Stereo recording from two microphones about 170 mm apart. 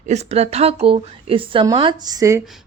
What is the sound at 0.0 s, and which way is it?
A woman's voice, 40° right (ahead or behind).